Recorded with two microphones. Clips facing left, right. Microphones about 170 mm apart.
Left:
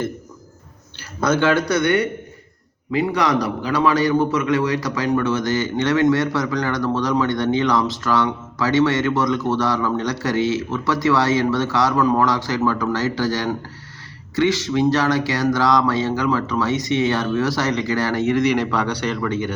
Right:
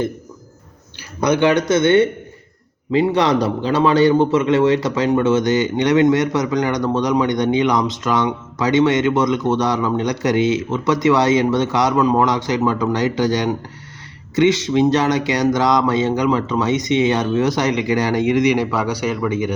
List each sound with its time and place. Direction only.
1.2 s a man's voice: 15° right (ahead or behind)